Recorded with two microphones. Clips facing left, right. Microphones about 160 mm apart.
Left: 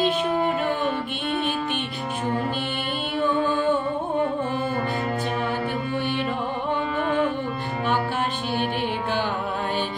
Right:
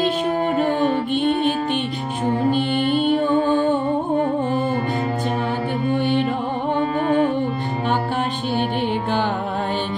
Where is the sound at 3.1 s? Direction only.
45° right (ahead or behind).